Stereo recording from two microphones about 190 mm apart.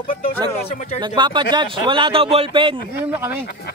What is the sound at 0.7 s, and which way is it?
Speech, 35° left (ahead or behind).